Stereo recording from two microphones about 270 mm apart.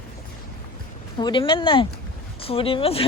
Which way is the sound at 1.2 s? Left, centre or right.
Centre.